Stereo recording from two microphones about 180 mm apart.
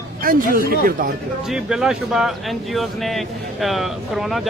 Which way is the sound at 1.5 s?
Centre (ahead or behind).